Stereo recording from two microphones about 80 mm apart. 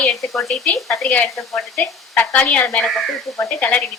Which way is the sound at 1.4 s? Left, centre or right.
Centre.